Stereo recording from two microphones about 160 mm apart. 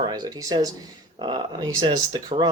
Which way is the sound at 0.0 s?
25° right (ahead or behind).